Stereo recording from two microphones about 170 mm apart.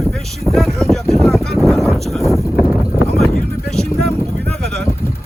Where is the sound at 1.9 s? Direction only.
Centre (ahead or behind).